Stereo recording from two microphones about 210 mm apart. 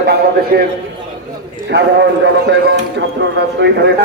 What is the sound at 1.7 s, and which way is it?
Speech, 55° right (ahead or behind).